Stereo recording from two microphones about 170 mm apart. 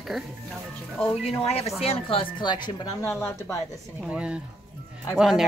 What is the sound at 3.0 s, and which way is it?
Speech, 15° left (ahead or behind).